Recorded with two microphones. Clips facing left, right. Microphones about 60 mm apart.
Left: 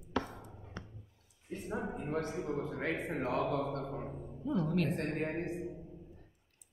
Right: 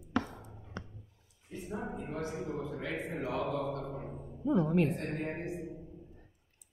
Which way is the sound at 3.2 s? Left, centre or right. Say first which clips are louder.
Left 1 dB; left.